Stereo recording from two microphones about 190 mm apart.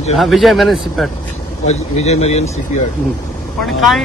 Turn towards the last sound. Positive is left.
turn(degrees=0)  # may be behind; listen again after turning